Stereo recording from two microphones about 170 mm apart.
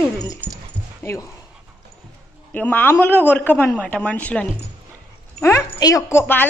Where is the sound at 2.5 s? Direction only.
10° left (ahead or behind).